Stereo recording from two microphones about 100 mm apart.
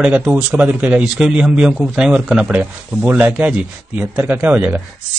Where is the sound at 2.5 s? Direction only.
20° right (ahead or behind).